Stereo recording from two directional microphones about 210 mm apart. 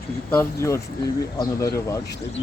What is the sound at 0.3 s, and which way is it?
Speech, 15° left (ahead or behind).